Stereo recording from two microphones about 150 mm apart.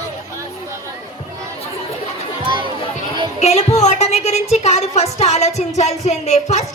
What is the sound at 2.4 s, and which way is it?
Music, 35° right (ahead or behind).